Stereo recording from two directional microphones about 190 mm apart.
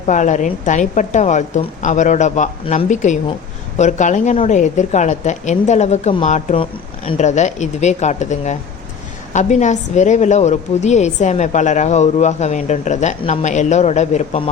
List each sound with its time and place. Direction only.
0.1 s a woman's voice: 40° left (ahead or behind)